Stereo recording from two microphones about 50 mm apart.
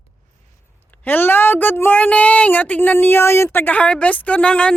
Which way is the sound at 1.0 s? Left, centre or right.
Left.